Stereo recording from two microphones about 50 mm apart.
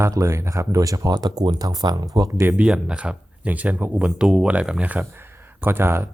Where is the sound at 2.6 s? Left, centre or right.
Centre.